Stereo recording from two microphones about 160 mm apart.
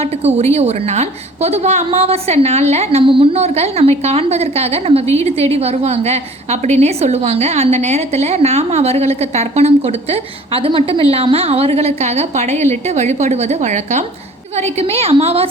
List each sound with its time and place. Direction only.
0.0 s a woman's voice: 40° right (ahead or behind)